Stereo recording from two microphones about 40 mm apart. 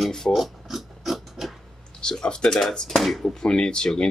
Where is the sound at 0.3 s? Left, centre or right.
Centre.